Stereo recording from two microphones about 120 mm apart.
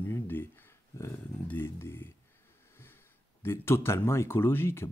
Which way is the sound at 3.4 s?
20° left (ahead or behind).